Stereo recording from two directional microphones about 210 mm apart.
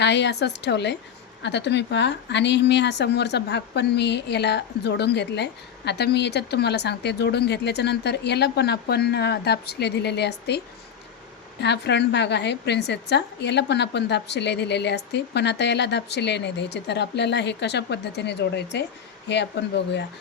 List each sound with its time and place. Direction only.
0.0 s a woman's voice: 55° left (ahead or behind)
11.6 s a woman's voice: 55° left (ahead or behind)